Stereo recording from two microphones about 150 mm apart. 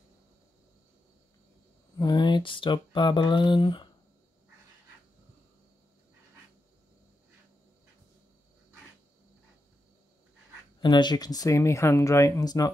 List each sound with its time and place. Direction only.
2.0 s speech: 30° left (ahead or behind)
10.8 s speech: 30° left (ahead or behind)